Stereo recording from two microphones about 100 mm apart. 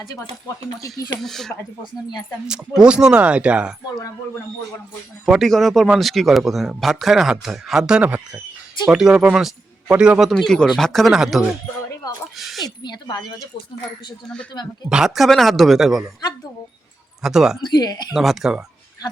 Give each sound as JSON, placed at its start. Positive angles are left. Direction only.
{"t": 0.4, "sound": "speech", "side_deg": 35}
{"t": 1.2, "sound": "speech", "side_deg": 5}
{"t": 2.5, "sound": "speech", "side_deg": -10}
{"t": 5.2, "sound": "speech", "side_deg": 0}
{"t": 12.4, "sound": "a sound", "side_deg": 0}
{"t": 12.6, "sound": "speech", "side_deg": 45}
{"t": 14.8, "sound": "speech", "side_deg": -5}
{"t": 17.2, "sound": "speech", "side_deg": -5}
{"t": 17.7, "sound": "speech", "side_deg": 45}
{"t": 18.1, "sound": "speech", "side_deg": -5}